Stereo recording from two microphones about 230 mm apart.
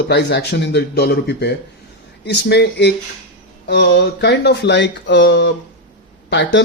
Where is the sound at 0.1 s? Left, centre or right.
Left.